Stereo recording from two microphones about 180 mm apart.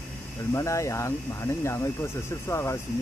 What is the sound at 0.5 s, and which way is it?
Speech, 15° left (ahead or behind).